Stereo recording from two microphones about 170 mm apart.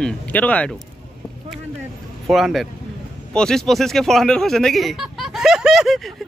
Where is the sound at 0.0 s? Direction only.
10° left (ahead or behind).